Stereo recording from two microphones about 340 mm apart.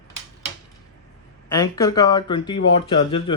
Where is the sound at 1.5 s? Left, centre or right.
Centre.